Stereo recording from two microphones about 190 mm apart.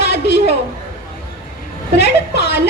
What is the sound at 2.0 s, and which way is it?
Speech, 60° left (ahead or behind).